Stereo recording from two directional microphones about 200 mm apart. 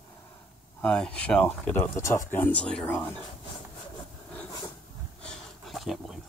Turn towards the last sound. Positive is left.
turn(degrees=0)  # may be behind; listen again after turning